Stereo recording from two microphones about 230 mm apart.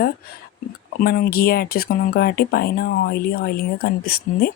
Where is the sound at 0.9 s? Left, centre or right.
Left.